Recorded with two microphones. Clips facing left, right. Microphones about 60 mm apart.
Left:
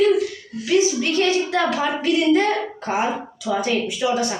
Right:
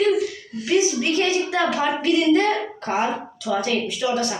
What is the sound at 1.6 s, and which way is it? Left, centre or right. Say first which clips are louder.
A child's voice: even; centre.